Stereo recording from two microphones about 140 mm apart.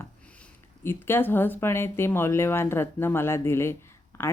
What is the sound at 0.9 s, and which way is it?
Speech, 15° left (ahead or behind).